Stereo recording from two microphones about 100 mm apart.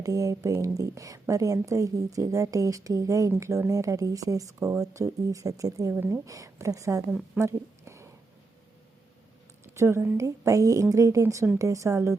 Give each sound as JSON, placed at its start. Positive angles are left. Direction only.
{"t": 0.0, "sound": "a woman's voice", "side_deg": -35}
{"t": 5.9, "sound": "a woman's voice", "side_deg": -20}
{"t": 6.2, "sound": "a woman's voice", "side_deg": -35}
{"t": 7.3, "sound": "a sound", "side_deg": -30}
{"t": 9.7, "sound": "a woman's voice", "side_deg": -25}